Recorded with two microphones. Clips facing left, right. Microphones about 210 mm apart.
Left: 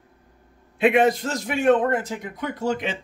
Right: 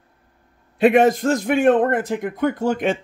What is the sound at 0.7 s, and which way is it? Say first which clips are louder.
A man's voice: right 4 dB; 40° right (ahead or behind).